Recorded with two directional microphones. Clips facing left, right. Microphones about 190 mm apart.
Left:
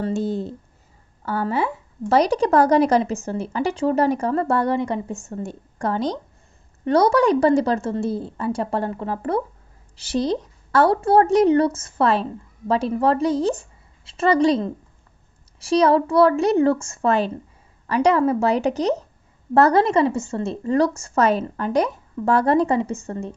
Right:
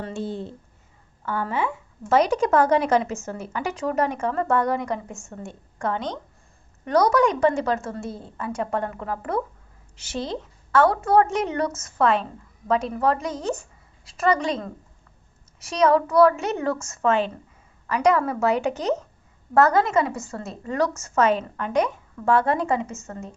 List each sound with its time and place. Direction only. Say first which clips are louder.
0.0 s a woman's voice: left 6 dB; 40° left (ahead or behind)